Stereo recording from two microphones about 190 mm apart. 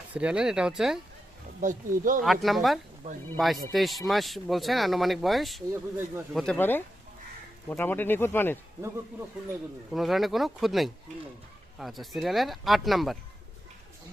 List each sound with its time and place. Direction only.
0.1 s speech: 5° right (ahead or behind)
1.6 s speech: 45° right (ahead or behind)
2.2 s speech: centre (ahead or behind)
5.7 s speech: 10° right (ahead or behind)
6.3 s speech: 5° left (ahead or behind)
9.9 s speech: centre (ahead or behind)